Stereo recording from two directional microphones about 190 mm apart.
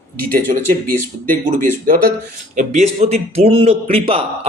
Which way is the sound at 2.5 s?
35° right (ahead or behind).